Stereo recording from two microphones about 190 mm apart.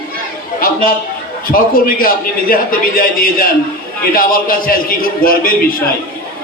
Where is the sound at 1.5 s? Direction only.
50° left (ahead or behind).